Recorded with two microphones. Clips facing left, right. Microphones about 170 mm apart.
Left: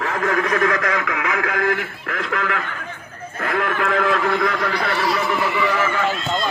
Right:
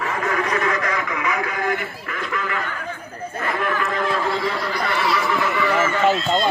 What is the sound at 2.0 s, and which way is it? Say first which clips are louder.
Goose: left 4 dB; 80° left.